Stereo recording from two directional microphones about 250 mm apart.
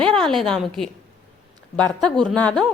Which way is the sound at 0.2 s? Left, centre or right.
Centre.